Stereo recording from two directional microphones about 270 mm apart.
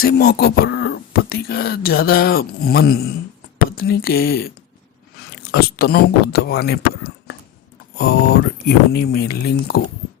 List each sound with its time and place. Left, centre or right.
0.0 s speech: left